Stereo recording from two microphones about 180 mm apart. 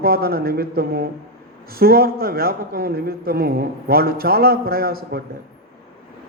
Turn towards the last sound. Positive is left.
turn(degrees=-55)  # may be behind; listen again after turning